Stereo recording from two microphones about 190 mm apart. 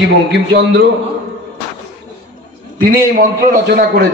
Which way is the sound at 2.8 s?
50° right (ahead or behind).